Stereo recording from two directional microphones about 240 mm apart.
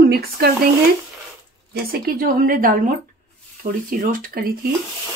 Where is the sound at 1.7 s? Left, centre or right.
Right.